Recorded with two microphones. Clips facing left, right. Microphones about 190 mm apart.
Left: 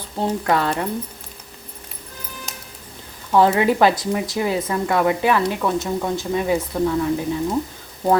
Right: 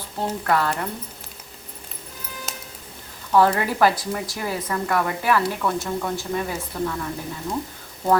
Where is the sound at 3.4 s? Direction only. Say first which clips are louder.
Left 3 dB; 20° left (ahead or behind).